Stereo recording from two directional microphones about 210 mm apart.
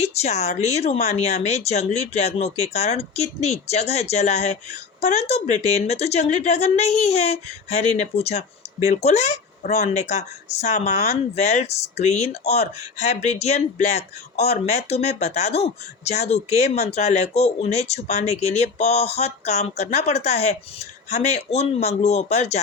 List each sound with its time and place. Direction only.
0.0 s speech: 30° left (ahead or behind)